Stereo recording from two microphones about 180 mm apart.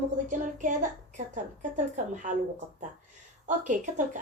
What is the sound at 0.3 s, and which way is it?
Speech, 45° right (ahead or behind).